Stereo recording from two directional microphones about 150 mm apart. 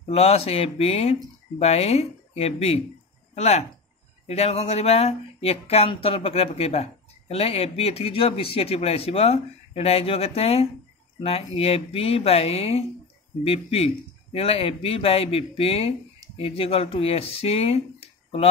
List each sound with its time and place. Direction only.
0.0 s speech: 45° left (ahead or behind)